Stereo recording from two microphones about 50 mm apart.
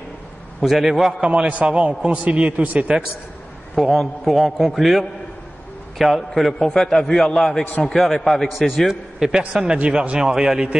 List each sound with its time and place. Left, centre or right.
0.6 s a man's voice: centre
1.2 s a man's voice: right
3.7 s a man's voice: centre